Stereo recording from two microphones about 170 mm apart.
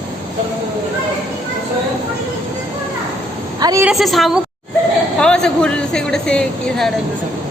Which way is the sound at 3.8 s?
Centre (ahead or behind).